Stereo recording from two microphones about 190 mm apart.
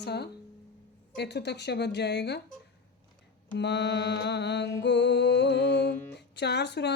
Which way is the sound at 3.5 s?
65° left (ahead or behind).